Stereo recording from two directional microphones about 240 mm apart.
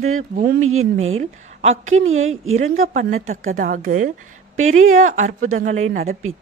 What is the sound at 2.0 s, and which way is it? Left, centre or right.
Speech, right.